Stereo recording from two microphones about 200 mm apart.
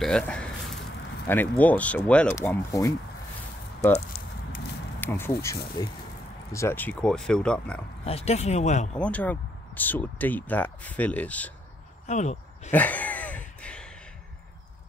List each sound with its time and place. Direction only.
0.0 s a sound: 5° left (ahead or behind)
1.2 s speech: 10° left (ahead or behind)
4.1 s walk: 30° left (ahead or behind)
5.0 s speech: 10° left (ahead or behind)
8.0 s speech: 30° left (ahead or behind)
8.9 s speech: 5° left (ahead or behind)
12.1 s speech: 35° left (ahead or behind)
12.7 s a sound: 10° left (ahead or behind)